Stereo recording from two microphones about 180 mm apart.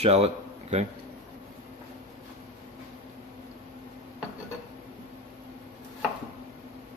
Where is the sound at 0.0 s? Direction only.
35° right (ahead or behind).